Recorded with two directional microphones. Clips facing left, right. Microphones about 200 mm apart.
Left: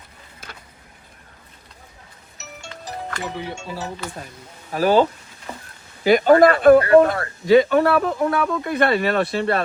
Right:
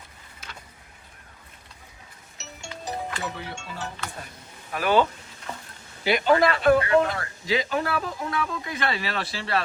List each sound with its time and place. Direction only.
4.7 s speech: 40° left (ahead or behind)
6.1 s speech: 45° left (ahead or behind)